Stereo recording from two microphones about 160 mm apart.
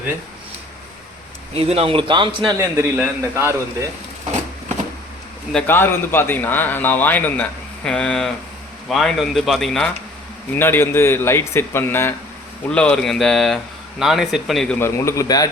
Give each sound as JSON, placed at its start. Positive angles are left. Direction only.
{"t": 1.5, "sound": "a man's voice", "side_deg": -35}
{"t": 2.6, "sound": "a man's voice", "side_deg": -15}
{"t": 5.5, "sound": "speech", "side_deg": 10}
{"t": 10.5, "sound": "speech", "side_deg": 15}
{"t": 14.8, "sound": "a man's voice", "side_deg": 15}